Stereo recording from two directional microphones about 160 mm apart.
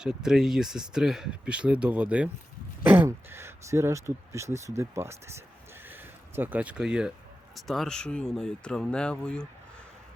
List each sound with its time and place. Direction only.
0.0 s speech: 5° right (ahead or behind)
5.7 s a sound: 10° right (ahead or behind)
7.5 s speech: centre (ahead or behind)